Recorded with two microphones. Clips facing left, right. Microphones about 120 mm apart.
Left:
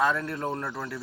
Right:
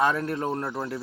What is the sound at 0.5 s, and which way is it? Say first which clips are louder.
Speech: right 3 dB; 40° right (ahead or behind).